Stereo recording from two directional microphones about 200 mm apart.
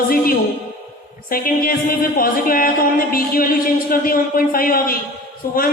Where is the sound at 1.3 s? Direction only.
45° left (ahead or behind).